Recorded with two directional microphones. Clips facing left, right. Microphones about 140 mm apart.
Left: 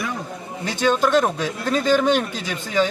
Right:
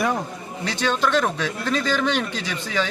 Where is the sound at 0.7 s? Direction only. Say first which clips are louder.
Left 4 dB; 45° left (ahead or behind).